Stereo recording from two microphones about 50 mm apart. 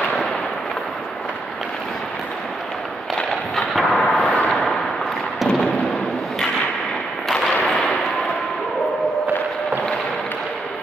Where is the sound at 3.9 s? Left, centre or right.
Centre.